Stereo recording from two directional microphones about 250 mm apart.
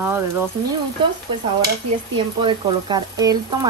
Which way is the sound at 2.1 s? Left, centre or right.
Centre.